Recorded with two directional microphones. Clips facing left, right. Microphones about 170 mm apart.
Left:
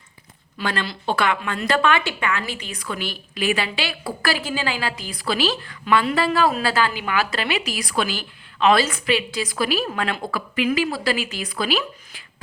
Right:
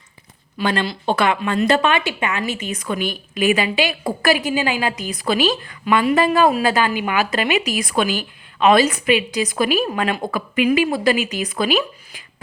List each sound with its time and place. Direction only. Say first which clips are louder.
0.6 s a woman's voice: right 5 dB; 20° right (ahead or behind)